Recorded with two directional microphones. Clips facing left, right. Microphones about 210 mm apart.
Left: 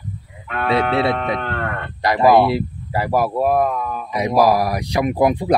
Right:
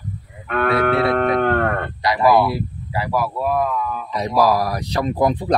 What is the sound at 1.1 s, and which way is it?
Speech, 50° right (ahead or behind).